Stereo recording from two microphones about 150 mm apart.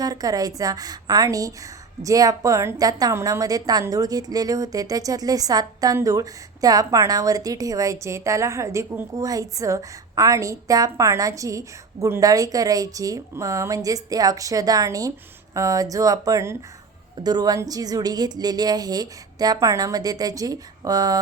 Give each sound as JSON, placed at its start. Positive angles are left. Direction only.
{"t": 0.0, "sound": "a woman's voice", "side_deg": -25}